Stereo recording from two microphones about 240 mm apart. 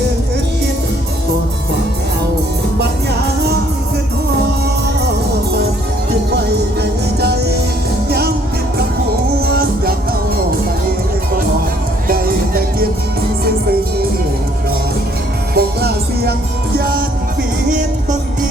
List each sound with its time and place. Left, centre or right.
9.5 s music: right
12.0 s music: right
15.5 s music: right